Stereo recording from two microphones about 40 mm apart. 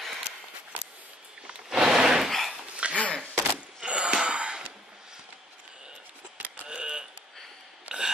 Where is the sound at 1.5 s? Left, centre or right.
Centre.